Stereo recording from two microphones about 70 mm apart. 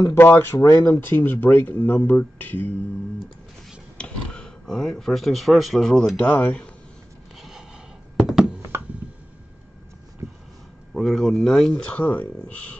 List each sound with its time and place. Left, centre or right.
0.1 s speech: left
4.0 s speech: centre
6.1 s speech: centre
8.2 s a sound: centre
10.2 s a sound: right
10.9 s speech: centre
11.7 s speech: centre